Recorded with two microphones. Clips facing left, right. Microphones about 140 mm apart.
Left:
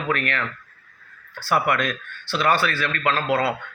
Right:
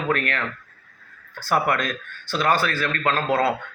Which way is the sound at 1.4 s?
45° right (ahead or behind).